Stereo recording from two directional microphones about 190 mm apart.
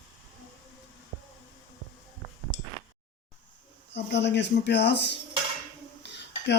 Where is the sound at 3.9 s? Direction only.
65° left (ahead or behind).